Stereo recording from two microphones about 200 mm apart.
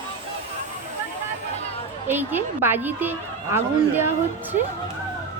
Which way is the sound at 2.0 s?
10° right (ahead or behind).